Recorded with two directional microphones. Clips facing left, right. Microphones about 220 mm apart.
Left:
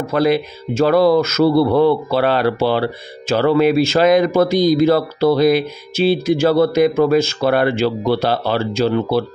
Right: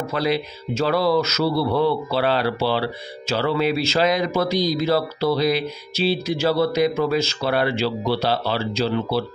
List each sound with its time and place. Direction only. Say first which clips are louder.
0.0 s speech: left 7 dB; 50° left (ahead or behind)